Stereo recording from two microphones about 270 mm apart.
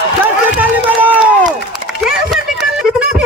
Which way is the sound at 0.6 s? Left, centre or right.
Centre.